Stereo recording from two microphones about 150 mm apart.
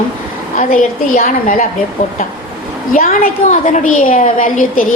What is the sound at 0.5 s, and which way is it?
A woman's voice, 65° left (ahead or behind).